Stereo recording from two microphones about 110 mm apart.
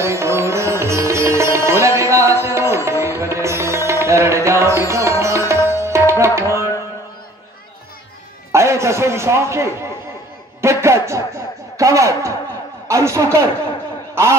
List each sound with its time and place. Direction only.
0.0 s music: 25° right (ahead or behind)
8.5 s a man's voice: 25° right (ahead or behind)